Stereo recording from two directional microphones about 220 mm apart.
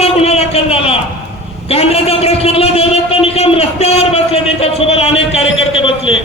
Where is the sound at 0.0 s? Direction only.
25° left (ahead or behind).